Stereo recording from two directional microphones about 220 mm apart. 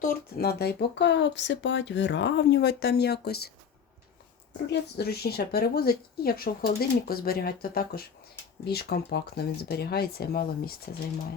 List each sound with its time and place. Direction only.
0.0 s speech: 40° left (ahead or behind)
4.6 s speech: 50° left (ahead or behind)